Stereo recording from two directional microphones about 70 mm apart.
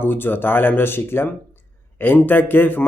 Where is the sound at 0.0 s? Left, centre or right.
Left.